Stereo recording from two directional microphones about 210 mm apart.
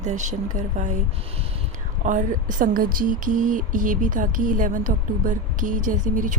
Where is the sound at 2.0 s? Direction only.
35° right (ahead or behind).